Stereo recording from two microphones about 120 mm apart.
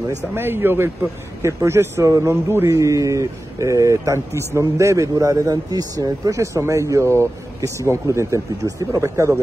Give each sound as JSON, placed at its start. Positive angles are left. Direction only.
{"t": 0.3, "sound": "speech", "side_deg": -20}